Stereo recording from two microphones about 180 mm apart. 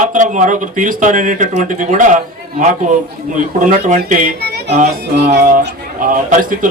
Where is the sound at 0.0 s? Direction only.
45° right (ahead or behind).